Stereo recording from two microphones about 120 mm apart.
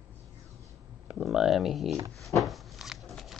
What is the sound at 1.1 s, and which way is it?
Speech, 5° right (ahead or behind).